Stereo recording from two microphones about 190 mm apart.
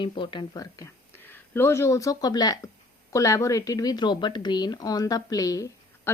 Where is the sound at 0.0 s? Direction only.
25° left (ahead or behind).